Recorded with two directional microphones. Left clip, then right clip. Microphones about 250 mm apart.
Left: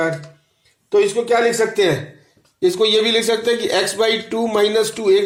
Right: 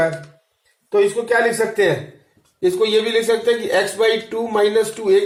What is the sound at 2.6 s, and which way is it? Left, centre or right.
Speech, left.